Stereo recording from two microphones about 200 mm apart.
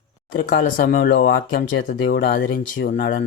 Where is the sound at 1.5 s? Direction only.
65° left (ahead or behind).